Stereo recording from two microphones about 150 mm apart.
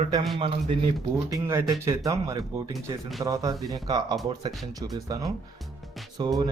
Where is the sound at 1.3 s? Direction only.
15° right (ahead or behind).